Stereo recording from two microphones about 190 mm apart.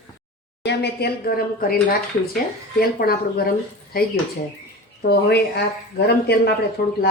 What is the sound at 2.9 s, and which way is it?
A woman's voice, 55° left (ahead or behind).